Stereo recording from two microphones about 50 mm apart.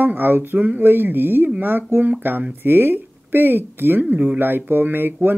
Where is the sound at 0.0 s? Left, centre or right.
Right.